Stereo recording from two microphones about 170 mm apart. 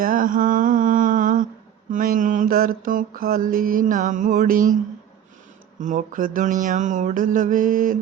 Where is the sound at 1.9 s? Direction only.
50° right (ahead or behind).